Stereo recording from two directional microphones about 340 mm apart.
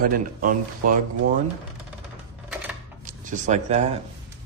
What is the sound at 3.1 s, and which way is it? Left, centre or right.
Speech, right.